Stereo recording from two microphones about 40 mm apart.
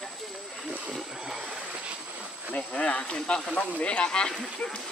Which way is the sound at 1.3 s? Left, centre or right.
Centre.